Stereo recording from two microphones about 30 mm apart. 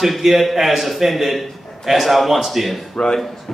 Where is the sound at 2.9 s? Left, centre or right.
Left.